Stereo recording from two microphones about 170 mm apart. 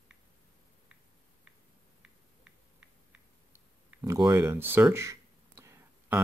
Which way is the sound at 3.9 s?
15° right (ahead or behind).